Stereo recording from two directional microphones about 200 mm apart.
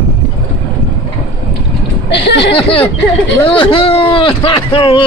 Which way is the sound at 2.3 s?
60° left (ahead or behind).